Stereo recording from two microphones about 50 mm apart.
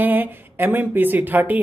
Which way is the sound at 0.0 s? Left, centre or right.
Right.